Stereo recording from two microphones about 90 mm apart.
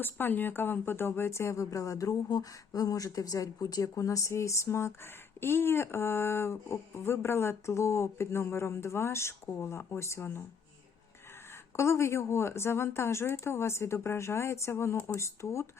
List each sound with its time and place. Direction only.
0.0 s speech: 20° left (ahead or behind)
11.8 s speech: 30° left (ahead or behind)